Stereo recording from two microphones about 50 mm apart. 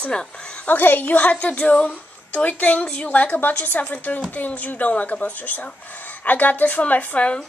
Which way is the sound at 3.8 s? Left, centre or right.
Left.